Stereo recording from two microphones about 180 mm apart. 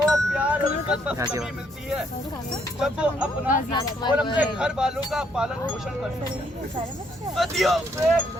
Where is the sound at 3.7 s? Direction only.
25° left (ahead or behind).